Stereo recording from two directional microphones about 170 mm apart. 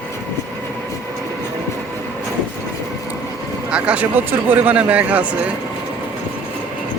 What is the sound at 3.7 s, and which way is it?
Speech, 5° right (ahead or behind).